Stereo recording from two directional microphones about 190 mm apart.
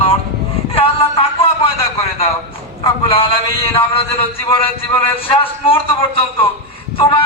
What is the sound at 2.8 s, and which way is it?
A man's voice, 30° left (ahead or behind).